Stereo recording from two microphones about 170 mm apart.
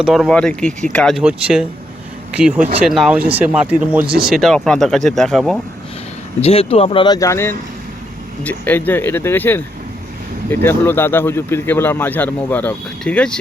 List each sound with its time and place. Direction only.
0.0 s speech: centre (ahead or behind)
6.4 s speech: 35° left (ahead or behind); by 13.4 s 5° left (ahead or behind)